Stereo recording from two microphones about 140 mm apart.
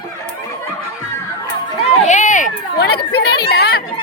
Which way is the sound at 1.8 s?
55° left (ahead or behind).